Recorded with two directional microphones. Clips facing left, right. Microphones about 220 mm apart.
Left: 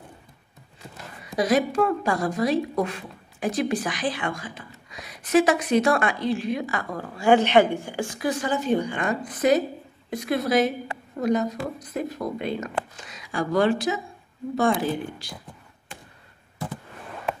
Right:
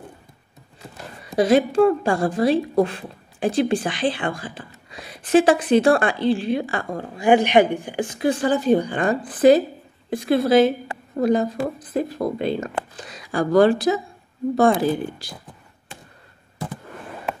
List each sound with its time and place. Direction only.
1.3 s a woman's voice: 30° right (ahead or behind)